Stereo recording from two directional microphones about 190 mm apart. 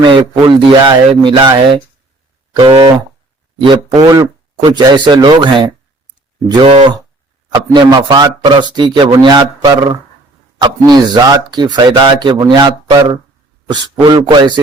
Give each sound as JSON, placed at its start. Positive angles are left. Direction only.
{"t": 0.0, "sound": "speech", "side_deg": -25}
{"t": 2.5, "sound": "a sound", "side_deg": -25}
{"t": 3.7, "sound": "speech", "side_deg": -20}